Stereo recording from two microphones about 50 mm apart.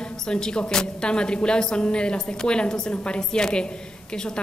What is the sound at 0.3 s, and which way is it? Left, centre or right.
A woman's voice, centre.